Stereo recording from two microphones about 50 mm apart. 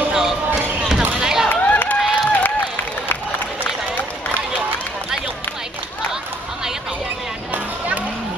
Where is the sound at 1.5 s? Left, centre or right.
Left.